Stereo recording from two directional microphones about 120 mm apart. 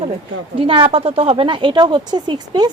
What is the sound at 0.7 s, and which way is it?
Speech, 50° right (ahead or behind).